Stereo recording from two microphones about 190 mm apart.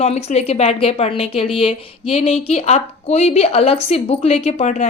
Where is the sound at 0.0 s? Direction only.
35° left (ahead or behind).